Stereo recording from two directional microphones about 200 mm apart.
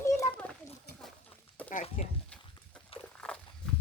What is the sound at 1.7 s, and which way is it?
Speech, 40° left (ahead or behind).